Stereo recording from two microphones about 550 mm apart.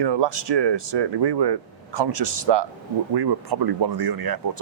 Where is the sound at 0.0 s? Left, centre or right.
Right.